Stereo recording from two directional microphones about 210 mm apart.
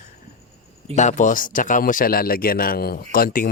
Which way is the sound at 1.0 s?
35° left (ahead or behind).